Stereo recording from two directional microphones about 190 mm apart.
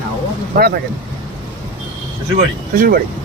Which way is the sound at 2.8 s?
50° right (ahead or behind).